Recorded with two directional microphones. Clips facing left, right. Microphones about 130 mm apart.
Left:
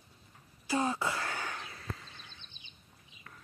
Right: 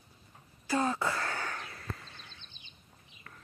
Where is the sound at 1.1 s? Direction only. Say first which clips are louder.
Right 2 dB; 15° left (ahead or behind).